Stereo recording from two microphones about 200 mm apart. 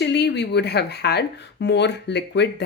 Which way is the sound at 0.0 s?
60° left (ahead or behind).